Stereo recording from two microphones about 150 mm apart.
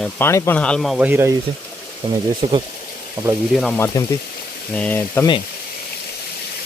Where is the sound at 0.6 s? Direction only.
5° left (ahead or behind).